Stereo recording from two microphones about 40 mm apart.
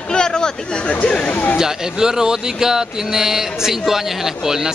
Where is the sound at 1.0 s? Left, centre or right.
Left.